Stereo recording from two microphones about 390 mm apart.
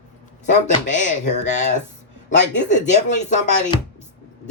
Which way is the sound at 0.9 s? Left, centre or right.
Centre.